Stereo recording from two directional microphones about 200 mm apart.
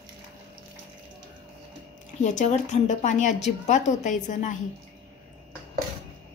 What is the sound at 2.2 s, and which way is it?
A woman's voice, 35° left (ahead or behind).